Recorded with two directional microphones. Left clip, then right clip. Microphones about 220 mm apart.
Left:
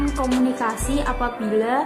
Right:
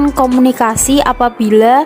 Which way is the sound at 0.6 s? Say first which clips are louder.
Right 12 dB; 45° right (ahead or behind).